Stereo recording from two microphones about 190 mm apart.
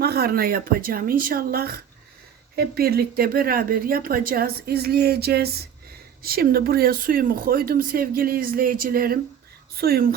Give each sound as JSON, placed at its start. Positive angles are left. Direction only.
{"t": 0.0, "sound": "speech", "side_deg": -55}